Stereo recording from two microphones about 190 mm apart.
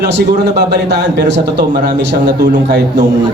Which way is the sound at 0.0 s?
60° right (ahead or behind).